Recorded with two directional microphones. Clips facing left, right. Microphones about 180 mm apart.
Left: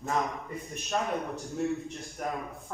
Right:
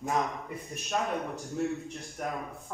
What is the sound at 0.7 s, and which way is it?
A man's voice, centre (ahead or behind).